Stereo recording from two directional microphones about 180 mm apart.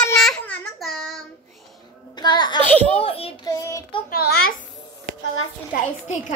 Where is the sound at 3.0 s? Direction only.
30° left (ahead or behind).